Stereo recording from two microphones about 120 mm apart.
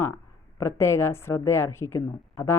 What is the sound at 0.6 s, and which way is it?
A woman's voice, 20° left (ahead or behind).